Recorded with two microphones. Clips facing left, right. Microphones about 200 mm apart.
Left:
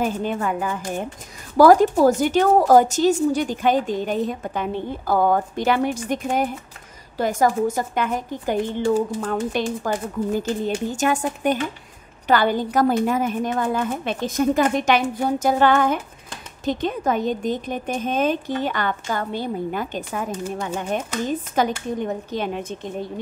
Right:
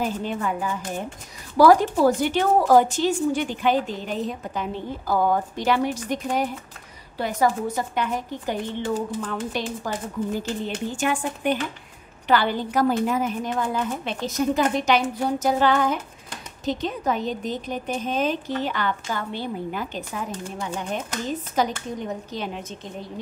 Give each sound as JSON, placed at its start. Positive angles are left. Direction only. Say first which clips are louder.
{"t": 0.0, "sound": "a woman's voice", "louder": "left 3 dB", "side_deg": 50}
{"t": 15.4, "sound": "a sound", "louder": "left 3 dB", "side_deg": 55}
{"t": 16.6, "sound": "a woman's voice", "louder": "left 3 dB", "side_deg": 50}